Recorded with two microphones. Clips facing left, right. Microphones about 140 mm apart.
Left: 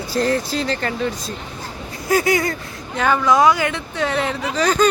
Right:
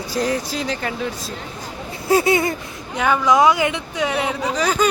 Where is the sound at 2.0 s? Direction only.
25° right (ahead or behind).